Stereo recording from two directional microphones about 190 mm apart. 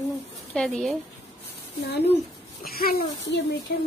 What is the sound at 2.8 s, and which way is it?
Speech, 50° left (ahead or behind).